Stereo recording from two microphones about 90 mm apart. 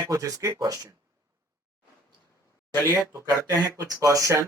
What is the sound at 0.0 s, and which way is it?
Speech, 40° right (ahead or behind).